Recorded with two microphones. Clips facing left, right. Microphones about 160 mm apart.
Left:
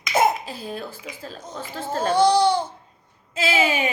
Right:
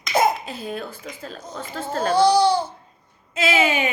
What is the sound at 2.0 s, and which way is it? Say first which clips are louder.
Speech: right 1 dB; 20° left (ahead or behind).